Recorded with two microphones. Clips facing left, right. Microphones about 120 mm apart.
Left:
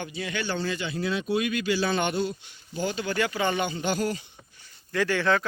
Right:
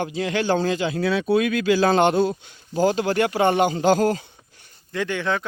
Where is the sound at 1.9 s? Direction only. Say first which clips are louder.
Right 8 dB; 90° right.